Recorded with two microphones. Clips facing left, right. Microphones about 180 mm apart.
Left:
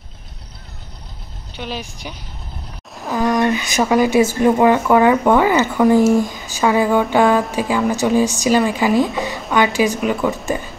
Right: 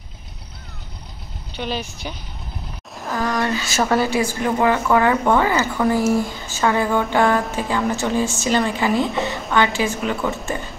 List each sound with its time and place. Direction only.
1.6 s speech: centre (ahead or behind)
3.0 s a sound: centre (ahead or behind)
3.3 s speech: 20° left (ahead or behind)
8.9 s speech: centre (ahead or behind)
9.5 s speech: 15° left (ahead or behind)